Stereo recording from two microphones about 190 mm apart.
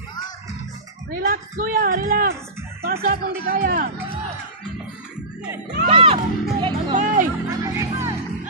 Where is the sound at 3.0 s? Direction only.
50° right (ahead or behind).